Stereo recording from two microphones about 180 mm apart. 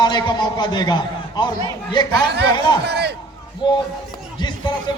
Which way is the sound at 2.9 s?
65° right (ahead or behind).